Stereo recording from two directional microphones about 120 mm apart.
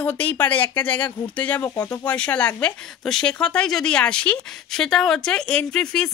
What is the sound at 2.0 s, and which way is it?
Speech, 10° left (ahead or behind).